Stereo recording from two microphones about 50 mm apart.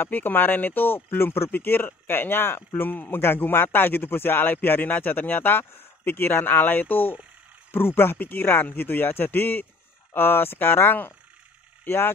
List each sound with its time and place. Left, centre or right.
0.0 s speech: left